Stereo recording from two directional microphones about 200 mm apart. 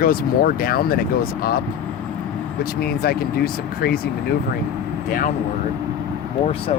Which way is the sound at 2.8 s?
50° left (ahead or behind).